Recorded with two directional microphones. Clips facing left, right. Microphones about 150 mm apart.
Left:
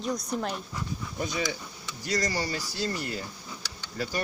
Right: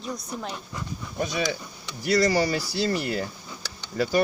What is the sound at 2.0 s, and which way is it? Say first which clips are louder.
Speech: right 8 dB; 90° right.